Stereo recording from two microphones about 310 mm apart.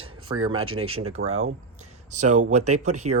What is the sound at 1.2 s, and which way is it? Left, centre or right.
Speech, right.